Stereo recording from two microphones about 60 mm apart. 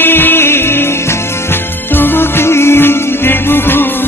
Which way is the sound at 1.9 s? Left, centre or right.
Left.